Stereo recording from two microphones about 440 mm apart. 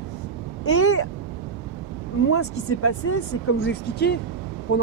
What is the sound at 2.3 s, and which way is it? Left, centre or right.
Speech, left.